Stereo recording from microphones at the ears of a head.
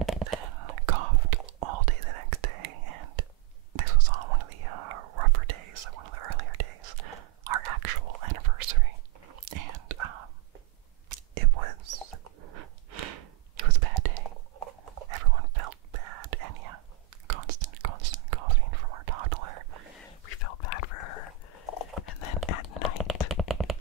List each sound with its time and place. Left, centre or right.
0.0 s whispering: right
20.2 s whispering: left